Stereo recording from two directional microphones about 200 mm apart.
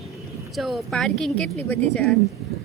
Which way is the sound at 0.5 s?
Centre (ahead or behind).